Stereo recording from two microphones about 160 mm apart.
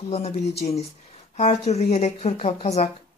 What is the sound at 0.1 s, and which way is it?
Speech, 40° left (ahead or behind).